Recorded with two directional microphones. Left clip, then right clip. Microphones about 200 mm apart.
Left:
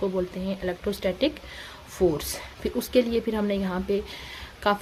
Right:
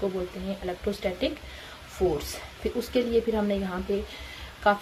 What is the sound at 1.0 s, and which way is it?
Speech, 50° left (ahead or behind).